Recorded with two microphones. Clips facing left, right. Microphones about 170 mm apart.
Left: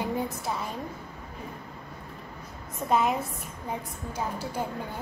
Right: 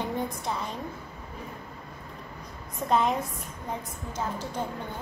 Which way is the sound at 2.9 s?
5° left (ahead or behind).